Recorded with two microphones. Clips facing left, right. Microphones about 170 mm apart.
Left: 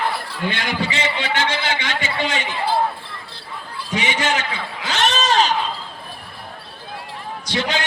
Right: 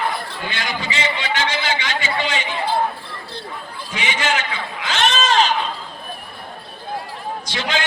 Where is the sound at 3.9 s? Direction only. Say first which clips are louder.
Left 1 dB; 35° left (ahead or behind).